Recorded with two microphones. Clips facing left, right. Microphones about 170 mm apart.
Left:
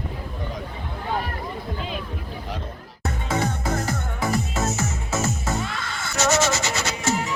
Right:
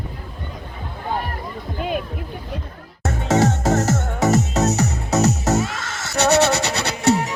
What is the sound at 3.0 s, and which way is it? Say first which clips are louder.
Music: right 7 dB; 85° right.